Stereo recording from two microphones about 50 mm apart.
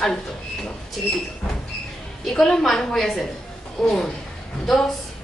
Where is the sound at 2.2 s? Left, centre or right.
Centre.